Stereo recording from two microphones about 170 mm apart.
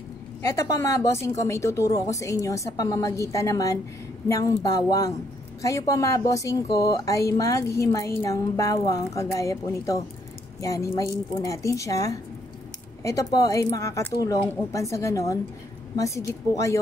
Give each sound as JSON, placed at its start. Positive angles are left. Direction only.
{"t": 0.4, "sound": "a woman's voice", "side_deg": 15}